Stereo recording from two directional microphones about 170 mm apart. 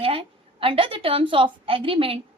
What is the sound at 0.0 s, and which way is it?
A woman's voice, 30° right (ahead or behind).